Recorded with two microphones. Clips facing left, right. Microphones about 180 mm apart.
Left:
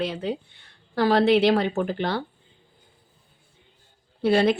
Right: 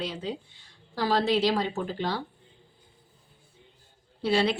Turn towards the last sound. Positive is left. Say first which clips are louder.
# left 5 dB
turn(degrees=50)  # may be behind; listen again after turning